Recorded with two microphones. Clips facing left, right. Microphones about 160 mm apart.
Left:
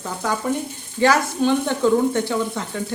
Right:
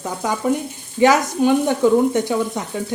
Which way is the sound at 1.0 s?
15° right (ahead or behind).